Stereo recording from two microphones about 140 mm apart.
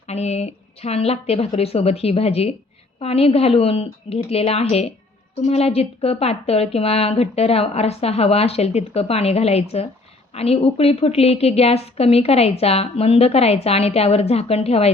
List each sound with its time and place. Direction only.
0.1 s a woman's voice: 50° left (ahead or behind)